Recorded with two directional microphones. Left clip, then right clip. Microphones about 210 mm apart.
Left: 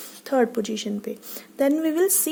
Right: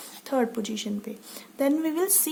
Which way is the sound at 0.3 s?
15° left (ahead or behind).